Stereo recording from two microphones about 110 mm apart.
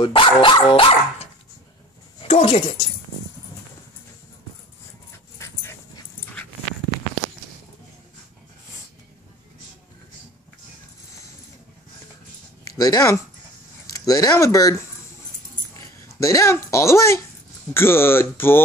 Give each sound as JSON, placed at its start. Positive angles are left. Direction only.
{"t": 0.0, "sound": "speech", "side_deg": 50}
{"t": 5.4, "sound": "dog", "side_deg": 25}
{"t": 12.6, "sound": "speech", "side_deg": 35}
{"t": 15.7, "sound": "dog", "side_deg": 30}
{"t": 17.7, "sound": "speech", "side_deg": 20}